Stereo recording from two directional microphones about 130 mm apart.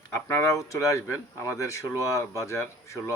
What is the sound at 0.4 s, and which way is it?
Speech, 25° left (ahead or behind).